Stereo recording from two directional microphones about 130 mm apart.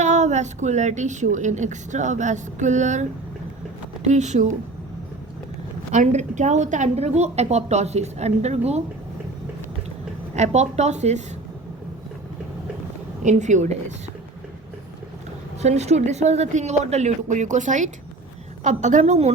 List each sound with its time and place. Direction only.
0.0 s a woman's voice: 65° right (ahead or behind)
5.9 s a woman's voice: 65° right (ahead or behind)
10.3 s a woman's voice: 60° right (ahead or behind)
13.2 s a woman's voice: 65° right (ahead or behind)
15.6 s a woman's voice: 60° right (ahead or behind)